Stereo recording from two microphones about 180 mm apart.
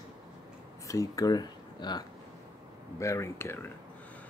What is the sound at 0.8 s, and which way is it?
Speech, 20° left (ahead or behind).